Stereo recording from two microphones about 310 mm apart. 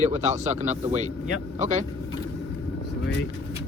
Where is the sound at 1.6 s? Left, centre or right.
Right.